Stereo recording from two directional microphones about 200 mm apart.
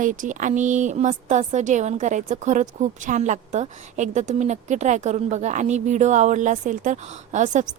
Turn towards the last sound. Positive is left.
turn(degrees=-35)  # may be behind; listen again after turning